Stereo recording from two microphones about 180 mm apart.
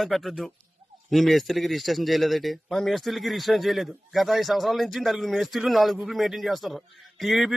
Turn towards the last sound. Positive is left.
turn(degrees=0)  # may be behind; listen again after turning